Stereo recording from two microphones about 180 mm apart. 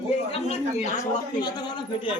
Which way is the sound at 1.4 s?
25° left (ahead or behind).